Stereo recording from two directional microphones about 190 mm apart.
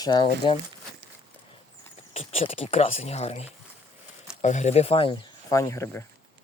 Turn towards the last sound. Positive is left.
turn(degrees=15)  # may be behind; listen again after turning